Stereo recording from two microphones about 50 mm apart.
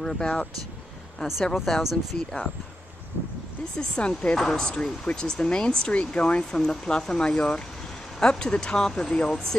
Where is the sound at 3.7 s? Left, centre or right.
Centre.